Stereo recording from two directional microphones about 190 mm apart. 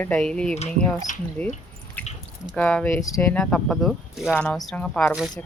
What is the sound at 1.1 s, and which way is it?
Speech, 40° left (ahead or behind).